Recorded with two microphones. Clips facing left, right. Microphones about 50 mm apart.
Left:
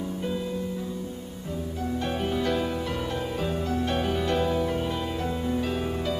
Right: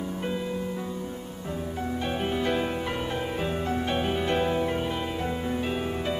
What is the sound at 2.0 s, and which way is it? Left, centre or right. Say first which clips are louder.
Music: even; centre.